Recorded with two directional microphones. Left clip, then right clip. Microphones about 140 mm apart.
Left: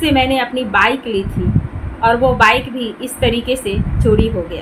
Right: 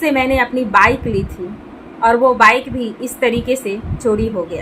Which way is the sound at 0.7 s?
10° right (ahead or behind).